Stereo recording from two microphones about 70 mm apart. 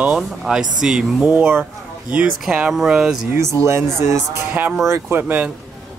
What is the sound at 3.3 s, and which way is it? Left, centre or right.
Speech, right.